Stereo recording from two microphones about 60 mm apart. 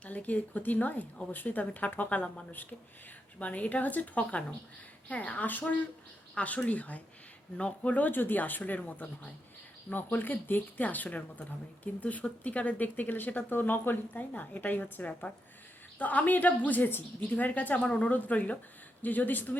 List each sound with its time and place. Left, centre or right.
0.0 s speech: left